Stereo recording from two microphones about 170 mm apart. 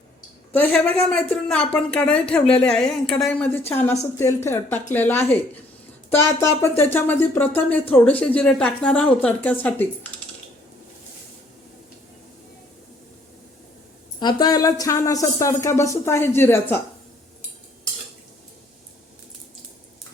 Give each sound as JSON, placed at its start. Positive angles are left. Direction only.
{"t": 1.1, "sound": "a woman's voice", "side_deg": 5}
{"t": 14.2, "sound": "speech", "side_deg": 25}